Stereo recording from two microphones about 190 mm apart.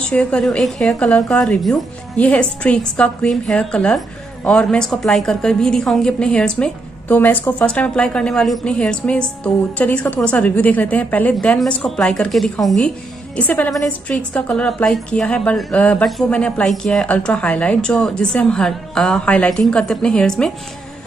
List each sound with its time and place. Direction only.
0.1 s a woman's voice: 5° left (ahead or behind)